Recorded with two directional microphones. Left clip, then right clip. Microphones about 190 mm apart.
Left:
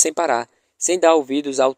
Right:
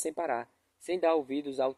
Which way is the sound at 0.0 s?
45° left (ahead or behind).